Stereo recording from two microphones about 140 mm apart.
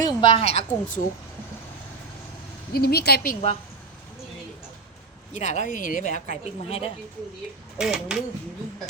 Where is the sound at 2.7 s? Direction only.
90° left.